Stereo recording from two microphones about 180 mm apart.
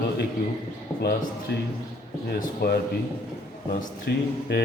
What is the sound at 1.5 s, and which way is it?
Speech, 65° left (ahead or behind).